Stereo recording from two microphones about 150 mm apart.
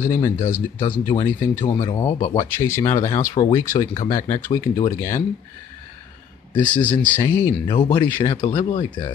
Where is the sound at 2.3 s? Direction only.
20° left (ahead or behind).